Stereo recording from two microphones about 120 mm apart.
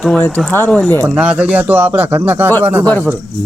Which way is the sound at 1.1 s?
10° right (ahead or behind).